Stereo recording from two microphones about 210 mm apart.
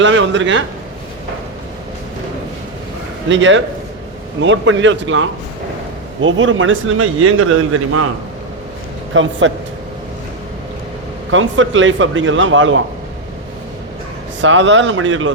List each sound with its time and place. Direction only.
0.0 s speech: 65° right (ahead or behind)
3.2 s speech: 60° right (ahead or behind)
9.1 s speech: 65° right (ahead or behind)
11.3 s speech: 65° right (ahead or behind)
14.4 s speech: 65° right (ahead or behind)